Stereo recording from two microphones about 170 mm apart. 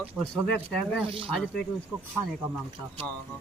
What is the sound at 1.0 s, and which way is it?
Speech, 30° right (ahead or behind).